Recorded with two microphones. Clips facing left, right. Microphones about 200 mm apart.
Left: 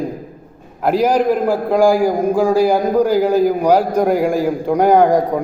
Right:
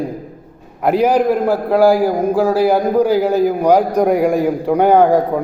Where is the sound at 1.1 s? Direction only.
5° right (ahead or behind).